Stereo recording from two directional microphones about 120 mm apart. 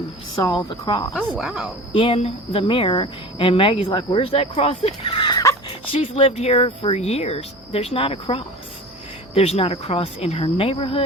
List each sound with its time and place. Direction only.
0.5 s speech: 45° left (ahead or behind)
1.3 s speech: 5° right (ahead or behind)
1.9 s speech: 50° left (ahead or behind)
5.6 s dog: 45° left (ahead or behind)
6.1 s speech: 60° left (ahead or behind)